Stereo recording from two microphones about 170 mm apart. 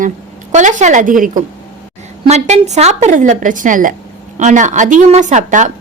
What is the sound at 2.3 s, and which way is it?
Speech, 40° right (ahead or behind).